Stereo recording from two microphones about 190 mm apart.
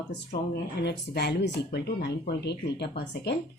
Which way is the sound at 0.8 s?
60° left (ahead or behind).